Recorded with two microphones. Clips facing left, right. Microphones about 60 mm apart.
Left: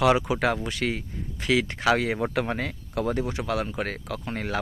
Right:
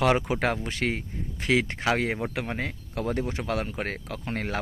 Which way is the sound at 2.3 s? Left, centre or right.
Centre.